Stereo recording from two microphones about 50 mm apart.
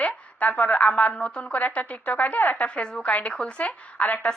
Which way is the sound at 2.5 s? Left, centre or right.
Centre.